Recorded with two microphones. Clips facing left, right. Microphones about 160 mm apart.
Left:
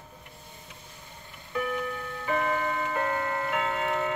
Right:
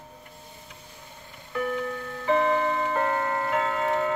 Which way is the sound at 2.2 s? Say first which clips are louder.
Right 6 dB; 30° right (ahead or behind).